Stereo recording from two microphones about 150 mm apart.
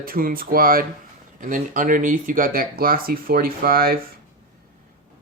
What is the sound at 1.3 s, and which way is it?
Speech, 60° right (ahead or behind).